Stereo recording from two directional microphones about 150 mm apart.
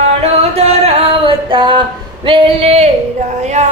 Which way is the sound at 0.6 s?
40° right (ahead or behind).